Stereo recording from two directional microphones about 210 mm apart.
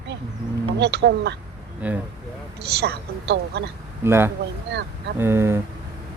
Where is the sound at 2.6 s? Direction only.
50° right (ahead or behind).